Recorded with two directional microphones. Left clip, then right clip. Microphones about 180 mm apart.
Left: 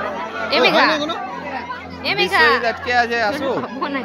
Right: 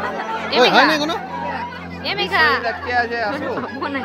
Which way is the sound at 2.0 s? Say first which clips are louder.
Left 2 dB; 5° left (ahead or behind).